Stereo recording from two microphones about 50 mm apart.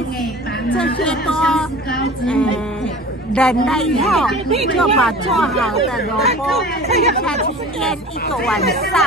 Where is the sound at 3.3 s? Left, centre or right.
Centre.